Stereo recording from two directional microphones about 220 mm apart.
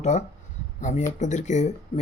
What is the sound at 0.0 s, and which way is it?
Speech, 30° left (ahead or behind).